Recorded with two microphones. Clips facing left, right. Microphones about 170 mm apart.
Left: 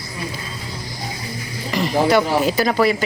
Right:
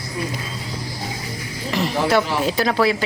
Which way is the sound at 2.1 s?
Centre (ahead or behind).